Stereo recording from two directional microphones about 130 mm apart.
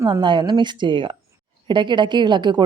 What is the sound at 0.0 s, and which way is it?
A woman's voice, 35° right (ahead or behind).